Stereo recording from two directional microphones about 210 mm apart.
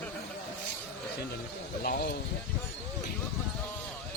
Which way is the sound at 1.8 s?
45° left (ahead or behind).